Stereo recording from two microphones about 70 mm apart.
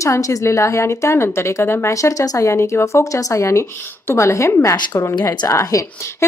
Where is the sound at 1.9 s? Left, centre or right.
Left.